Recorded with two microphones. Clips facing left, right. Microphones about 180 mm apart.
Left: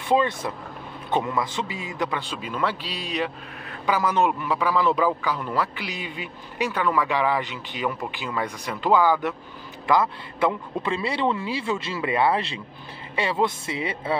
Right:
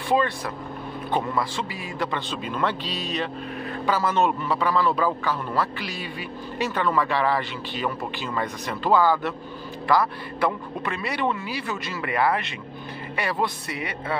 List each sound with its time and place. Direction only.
0.1 s a man's voice: 25° left (ahead or behind)
2.0 s a man's voice: 10° left (ahead or behind); by 14.1 s 25° left (ahead or behind)